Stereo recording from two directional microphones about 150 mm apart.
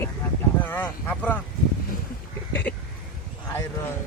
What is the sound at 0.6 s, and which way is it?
Speech, 15° left (ahead or behind).